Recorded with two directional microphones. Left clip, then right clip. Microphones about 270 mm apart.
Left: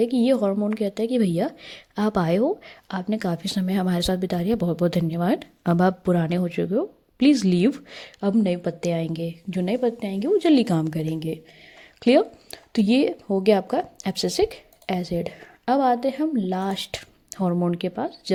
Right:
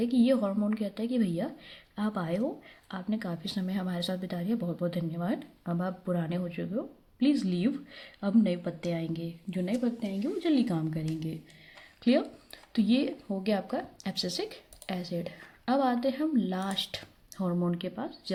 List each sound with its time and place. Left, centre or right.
0.0 s a woman's voice: left
12.0 s a woman's voice: left